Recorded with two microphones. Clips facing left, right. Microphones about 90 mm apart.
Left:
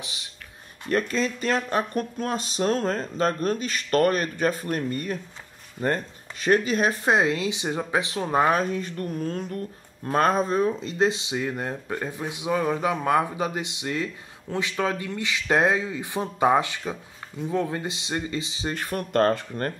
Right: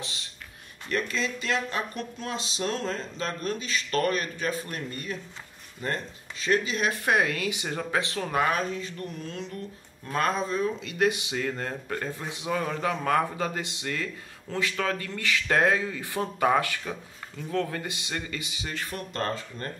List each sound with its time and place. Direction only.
0.0 s a sound: 15° left (ahead or behind)
0.8 s speech: 40° left (ahead or behind)
7.1 s speech: 25° left (ahead or behind)
8.4 s speech: 30° left (ahead or behind)
8.6 s speech: 45° left (ahead or behind); by 18.7 s 25° left (ahead or behind)
18.7 s speech: 45° left (ahead or behind)